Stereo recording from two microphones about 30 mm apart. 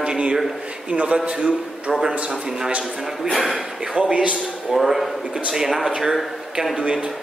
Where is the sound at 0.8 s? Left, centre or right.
Right.